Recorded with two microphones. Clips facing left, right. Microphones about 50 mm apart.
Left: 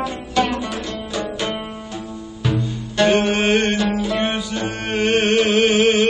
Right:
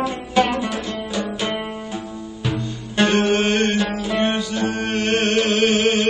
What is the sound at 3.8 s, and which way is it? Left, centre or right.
Music, centre.